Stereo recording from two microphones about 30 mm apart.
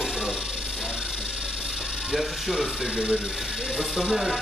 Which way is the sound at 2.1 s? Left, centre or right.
Centre.